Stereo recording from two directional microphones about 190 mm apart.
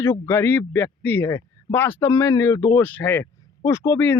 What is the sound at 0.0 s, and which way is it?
Speech, 10° left (ahead or behind).